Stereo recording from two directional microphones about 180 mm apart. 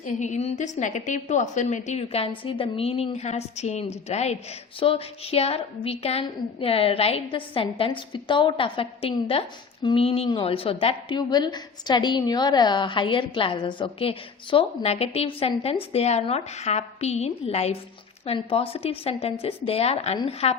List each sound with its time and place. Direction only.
0.0 s a woman's voice: 40° left (ahead or behind)